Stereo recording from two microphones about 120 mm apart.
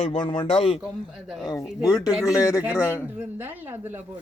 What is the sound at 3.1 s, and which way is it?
Speech, 15° right (ahead or behind).